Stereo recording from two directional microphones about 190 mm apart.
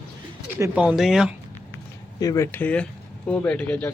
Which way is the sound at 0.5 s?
10° right (ahead or behind).